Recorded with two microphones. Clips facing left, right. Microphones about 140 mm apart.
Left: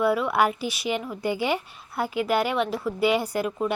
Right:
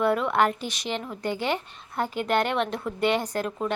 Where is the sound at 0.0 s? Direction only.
5° left (ahead or behind).